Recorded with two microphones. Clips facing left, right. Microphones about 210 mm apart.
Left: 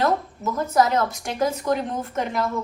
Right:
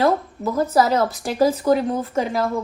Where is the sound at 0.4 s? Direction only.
35° right (ahead or behind).